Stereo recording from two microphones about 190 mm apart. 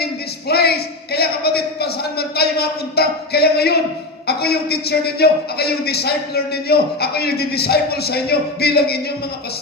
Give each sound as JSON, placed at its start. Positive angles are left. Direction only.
{"t": 0.0, "sound": "a man's voice", "side_deg": 55}